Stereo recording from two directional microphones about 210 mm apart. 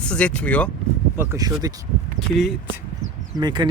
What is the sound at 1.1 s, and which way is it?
Speech, 10° right (ahead or behind).